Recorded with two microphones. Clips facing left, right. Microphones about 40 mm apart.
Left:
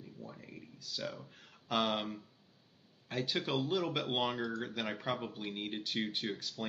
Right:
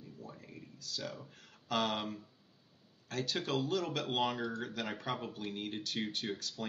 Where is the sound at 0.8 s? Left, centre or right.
Centre.